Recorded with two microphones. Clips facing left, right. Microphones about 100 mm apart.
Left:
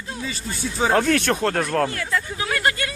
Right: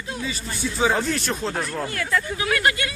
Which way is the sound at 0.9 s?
65° left (ahead or behind).